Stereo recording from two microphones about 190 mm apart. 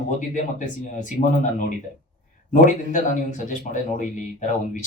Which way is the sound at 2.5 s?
40° left (ahead or behind).